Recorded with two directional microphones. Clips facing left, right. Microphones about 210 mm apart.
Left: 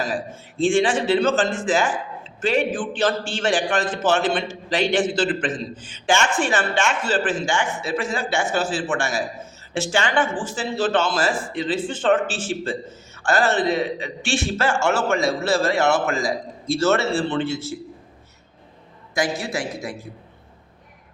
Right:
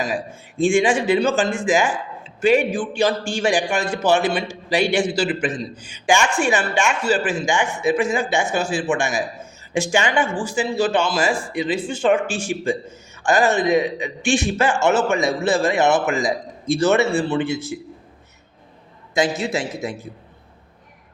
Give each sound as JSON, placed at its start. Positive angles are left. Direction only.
{"t": 0.6, "sound": "a man's voice", "side_deg": -15}
{"t": 2.2, "sound": "a sound", "side_deg": -15}
{"t": 2.7, "sound": "a man's voice", "side_deg": -10}
{"t": 19.1, "sound": "a man's voice", "side_deg": -25}